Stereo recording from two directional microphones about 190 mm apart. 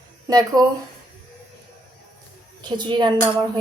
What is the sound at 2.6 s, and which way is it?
Speech, 20° right (ahead or behind).